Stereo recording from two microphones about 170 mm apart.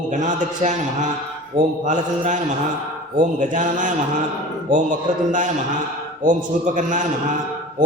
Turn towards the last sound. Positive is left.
turn(degrees=-50)  # may be behind; listen again after turning